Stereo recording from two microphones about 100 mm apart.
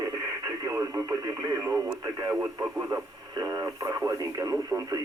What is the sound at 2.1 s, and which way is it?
Speech, 30° right (ahead or behind).